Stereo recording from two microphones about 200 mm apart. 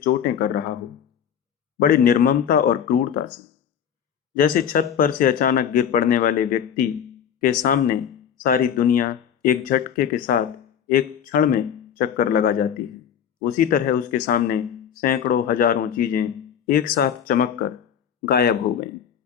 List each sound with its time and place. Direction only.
0.0 s speech: 45° left (ahead or behind)
1.8 s speech: 45° left (ahead or behind)
4.4 s speech: 45° left (ahead or behind)